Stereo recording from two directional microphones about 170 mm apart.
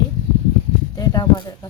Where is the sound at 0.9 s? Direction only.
20° left (ahead or behind).